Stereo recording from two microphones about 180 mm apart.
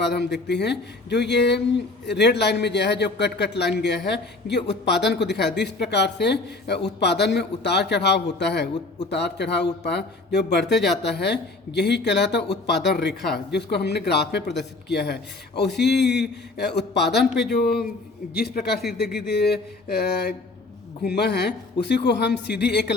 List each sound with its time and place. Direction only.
0.0 s speech: 70° left (ahead or behind)